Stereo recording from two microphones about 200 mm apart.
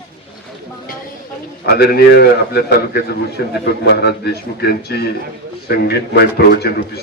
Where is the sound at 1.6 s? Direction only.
55° left (ahead or behind).